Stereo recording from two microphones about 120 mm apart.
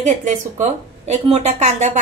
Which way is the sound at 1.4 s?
70° right (ahead or behind).